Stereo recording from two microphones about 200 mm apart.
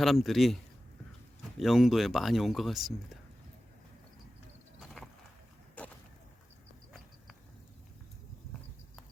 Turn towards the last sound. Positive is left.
turn(degrees=-5)  # may be behind; listen again after turning